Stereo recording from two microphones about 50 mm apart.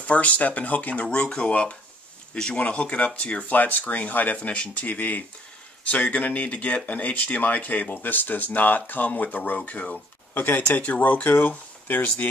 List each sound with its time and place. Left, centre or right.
0.0 s speech: left
1.1 s speech: left
2.3 s speech: centre; by 4.4 s left
4.4 s speech: left
10.3 s speech: left
10.8 s speech: left